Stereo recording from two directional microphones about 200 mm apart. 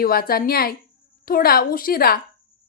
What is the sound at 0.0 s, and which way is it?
Speech, 50° left (ahead or behind).